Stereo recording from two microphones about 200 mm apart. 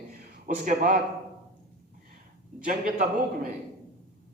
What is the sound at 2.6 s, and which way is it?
Speech, 40° right (ahead or behind).